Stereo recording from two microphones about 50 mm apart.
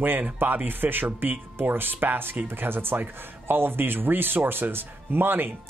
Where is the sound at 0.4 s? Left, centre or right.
Right.